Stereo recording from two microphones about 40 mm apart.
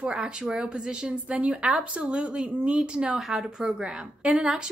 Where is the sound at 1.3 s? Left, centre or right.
Right.